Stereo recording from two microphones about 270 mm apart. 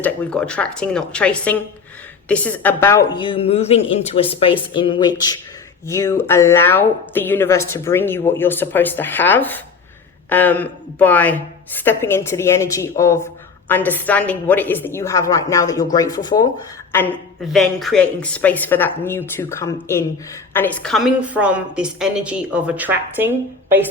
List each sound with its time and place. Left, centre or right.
0.0 s a woman's voice: centre